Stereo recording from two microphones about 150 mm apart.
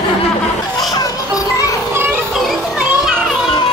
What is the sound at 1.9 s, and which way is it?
Children playing, 15° right (ahead or behind).